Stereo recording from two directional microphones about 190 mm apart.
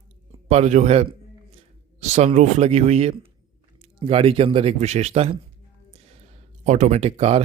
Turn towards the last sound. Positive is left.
turn(degrees=-30)  # may be behind; listen again after turning